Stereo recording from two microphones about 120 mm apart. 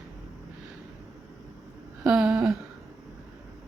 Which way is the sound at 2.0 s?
10° right (ahead or behind).